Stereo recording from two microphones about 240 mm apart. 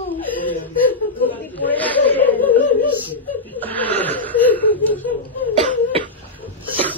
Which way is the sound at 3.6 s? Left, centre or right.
Centre.